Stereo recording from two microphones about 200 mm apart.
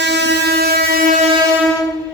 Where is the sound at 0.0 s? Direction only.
60° right (ahead or behind).